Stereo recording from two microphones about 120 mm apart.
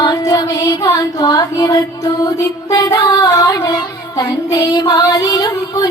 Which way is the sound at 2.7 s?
35° left (ahead or behind).